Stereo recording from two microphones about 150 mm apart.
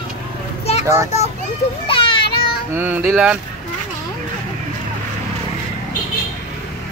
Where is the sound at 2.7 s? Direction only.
15° right (ahead or behind).